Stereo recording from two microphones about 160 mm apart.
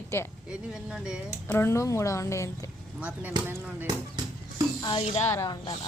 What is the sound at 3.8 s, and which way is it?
Music, 25° right (ahead or behind).